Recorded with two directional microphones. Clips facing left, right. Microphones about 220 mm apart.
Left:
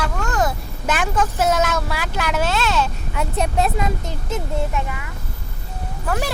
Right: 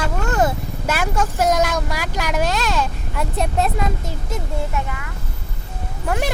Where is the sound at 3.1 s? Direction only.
Centre (ahead or behind).